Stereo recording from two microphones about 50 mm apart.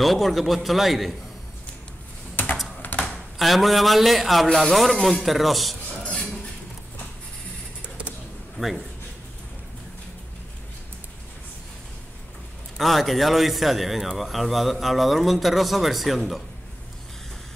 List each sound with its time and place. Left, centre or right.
0.0 s speech: centre
2.8 s a sound: left
3.3 s speech: centre
6.1 s a sound: centre
8.5 s speech: centre
12.7 s speech: centre